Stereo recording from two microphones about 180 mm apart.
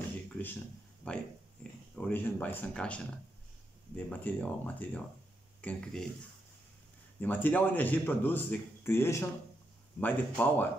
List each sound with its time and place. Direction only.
1.0 s a man's voice: 10° left (ahead or behind)
7.2 s a man's voice: 10° left (ahead or behind)